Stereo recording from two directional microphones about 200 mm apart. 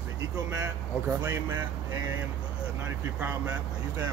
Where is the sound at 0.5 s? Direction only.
15° right (ahead or behind).